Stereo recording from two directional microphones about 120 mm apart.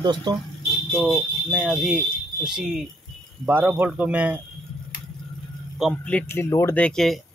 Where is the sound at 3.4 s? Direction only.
15° right (ahead or behind).